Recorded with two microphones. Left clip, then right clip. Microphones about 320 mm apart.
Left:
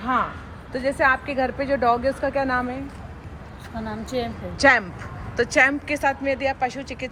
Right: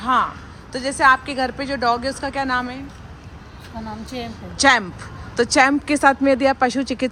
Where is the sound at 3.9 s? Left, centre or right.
Centre.